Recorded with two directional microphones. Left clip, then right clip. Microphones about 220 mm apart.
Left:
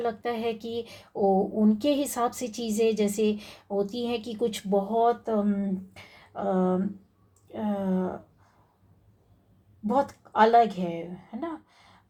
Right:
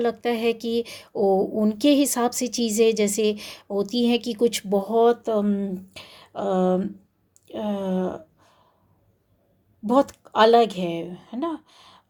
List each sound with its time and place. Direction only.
0.0 s a woman's voice: 40° right (ahead or behind)
9.8 s a woman's voice: 50° right (ahead or behind)